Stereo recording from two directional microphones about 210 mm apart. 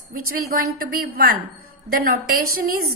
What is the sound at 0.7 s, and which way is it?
A woman's voice, 45° right (ahead or behind).